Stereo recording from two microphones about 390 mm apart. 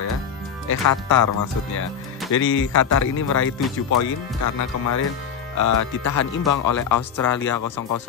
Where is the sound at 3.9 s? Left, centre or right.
Left.